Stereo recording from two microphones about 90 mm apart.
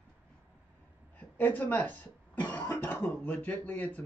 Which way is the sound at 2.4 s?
15° left (ahead or behind).